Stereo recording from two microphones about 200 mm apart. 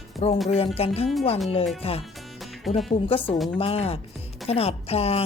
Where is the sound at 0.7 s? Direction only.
30° left (ahead or behind).